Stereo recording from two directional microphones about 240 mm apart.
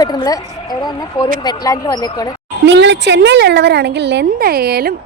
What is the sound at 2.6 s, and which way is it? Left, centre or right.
A woman's voice, right.